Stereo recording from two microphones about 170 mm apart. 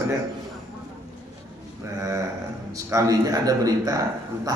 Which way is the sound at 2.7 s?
20° right (ahead or behind).